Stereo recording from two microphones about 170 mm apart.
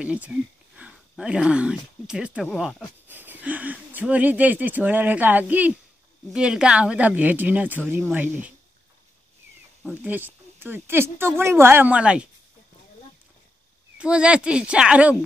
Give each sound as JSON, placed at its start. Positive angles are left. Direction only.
{"t": 0.0, "sound": "speech", "side_deg": -5}
{"t": 3.1, "sound": "speech", "side_deg": -10}
{"t": 9.8, "sound": "speech", "side_deg": -10}
{"t": 13.9, "sound": "speech", "side_deg": -5}